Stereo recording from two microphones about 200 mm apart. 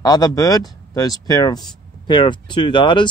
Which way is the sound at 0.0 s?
20° left (ahead or behind).